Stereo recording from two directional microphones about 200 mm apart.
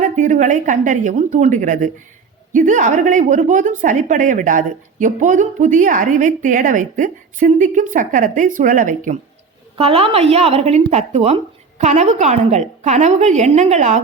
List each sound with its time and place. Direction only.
0.0 s speech: 40° right (ahead or behind)
9.7 s speech: 30° right (ahead or behind)